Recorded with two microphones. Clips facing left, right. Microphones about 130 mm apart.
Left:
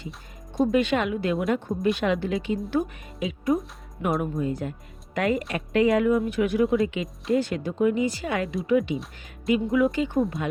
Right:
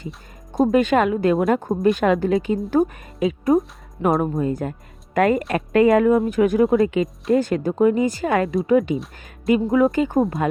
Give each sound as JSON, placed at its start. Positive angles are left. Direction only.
{"t": 0.6, "sound": "speech", "side_deg": -45}
{"t": 9.7, "sound": "speech", "side_deg": -45}